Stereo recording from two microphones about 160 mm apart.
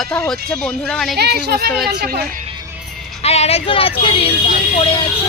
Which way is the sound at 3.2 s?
40° left (ahead or behind).